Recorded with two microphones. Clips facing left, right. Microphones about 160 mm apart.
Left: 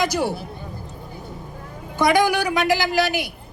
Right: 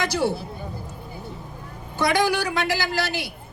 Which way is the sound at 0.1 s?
15° left (ahead or behind).